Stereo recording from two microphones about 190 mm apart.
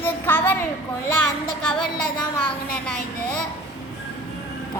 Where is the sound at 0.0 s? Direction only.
10° left (ahead or behind).